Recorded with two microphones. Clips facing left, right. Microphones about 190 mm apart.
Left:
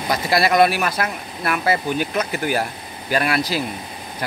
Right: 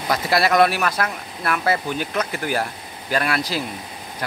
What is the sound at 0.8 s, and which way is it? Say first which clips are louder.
Speech: even; 20° left (ahead or behind).